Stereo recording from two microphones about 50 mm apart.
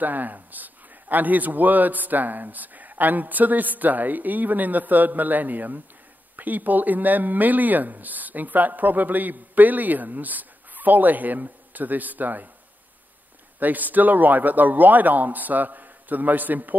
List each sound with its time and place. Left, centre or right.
0.0 s speech: right
13.6 s speech: right